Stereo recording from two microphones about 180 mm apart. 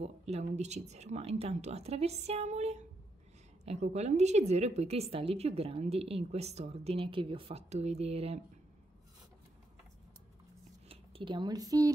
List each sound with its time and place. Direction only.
0.0 s a woman's voice: 35° right (ahead or behind)
10.9 s speech: 30° right (ahead or behind)